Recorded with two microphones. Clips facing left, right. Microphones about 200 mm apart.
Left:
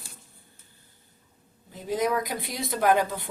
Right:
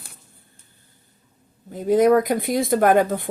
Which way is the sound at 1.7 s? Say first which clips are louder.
Right 11 dB; 50° right (ahead or behind).